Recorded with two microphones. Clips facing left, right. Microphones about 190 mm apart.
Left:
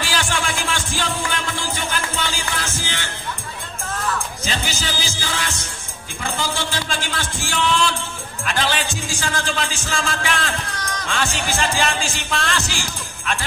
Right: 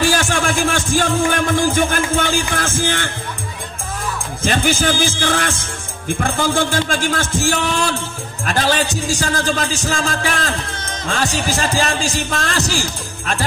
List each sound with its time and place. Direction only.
0.0 s music: 45° right (ahead or behind)
4.4 s speech: 50° right (ahead or behind)
10.8 s music: 25° right (ahead or behind)
11.1 s speech: 40° right (ahead or behind)